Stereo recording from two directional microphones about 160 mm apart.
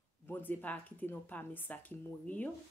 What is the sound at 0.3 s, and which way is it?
Speech, 10° left (ahead or behind).